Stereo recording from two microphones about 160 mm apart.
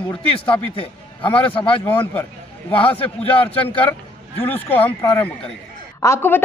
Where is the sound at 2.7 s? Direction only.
35° left (ahead or behind).